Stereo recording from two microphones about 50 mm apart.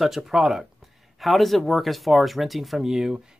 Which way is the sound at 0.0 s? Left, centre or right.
Centre.